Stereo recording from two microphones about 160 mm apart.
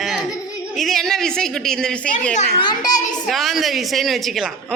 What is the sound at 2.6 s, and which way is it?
Speech, 25° left (ahead or behind).